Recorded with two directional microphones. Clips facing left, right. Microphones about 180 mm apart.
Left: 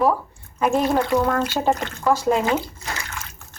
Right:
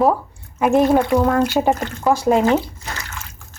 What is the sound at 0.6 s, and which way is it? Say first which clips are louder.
Speech: right 5 dB; 10° right (ahead or behind).